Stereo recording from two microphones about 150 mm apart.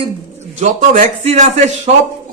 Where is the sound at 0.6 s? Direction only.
50° right (ahead or behind).